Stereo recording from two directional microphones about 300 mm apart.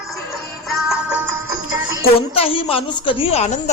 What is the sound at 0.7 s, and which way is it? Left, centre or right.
Music, centre.